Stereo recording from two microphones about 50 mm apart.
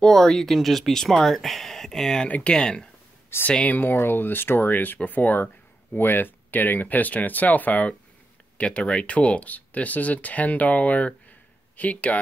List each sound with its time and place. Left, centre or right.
0.0 s speech: centre
2.2 s speech: left
2.5 s speech: centre
3.3 s speech: left
3.6 s speech: left